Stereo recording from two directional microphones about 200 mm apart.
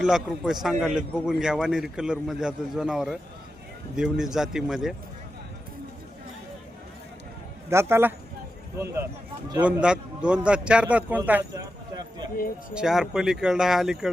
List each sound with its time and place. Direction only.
0.0 s a man's voice: centre (ahead or behind)
7.7 s speech: 15° right (ahead or behind)
9.6 s a man's voice: 5° right (ahead or behind)
12.7 s a man's voice: centre (ahead or behind)